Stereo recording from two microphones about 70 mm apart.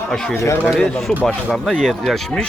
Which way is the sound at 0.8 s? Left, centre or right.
Centre.